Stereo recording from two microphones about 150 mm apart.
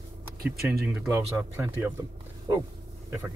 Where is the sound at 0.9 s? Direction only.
15° right (ahead or behind).